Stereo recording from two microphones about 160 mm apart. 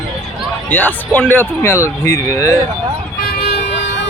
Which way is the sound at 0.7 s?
10° left (ahead or behind).